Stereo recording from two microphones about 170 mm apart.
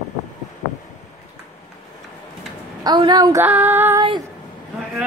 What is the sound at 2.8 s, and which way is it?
Speech, 25° right (ahead or behind).